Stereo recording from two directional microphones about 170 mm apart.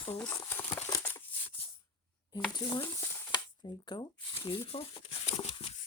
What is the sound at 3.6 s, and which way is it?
Speech, 25° left (ahead or behind).